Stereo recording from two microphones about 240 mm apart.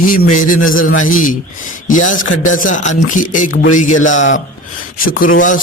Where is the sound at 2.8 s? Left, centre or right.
Left.